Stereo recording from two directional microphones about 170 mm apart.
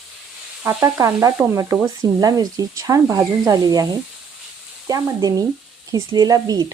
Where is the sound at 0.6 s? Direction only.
15° right (ahead or behind).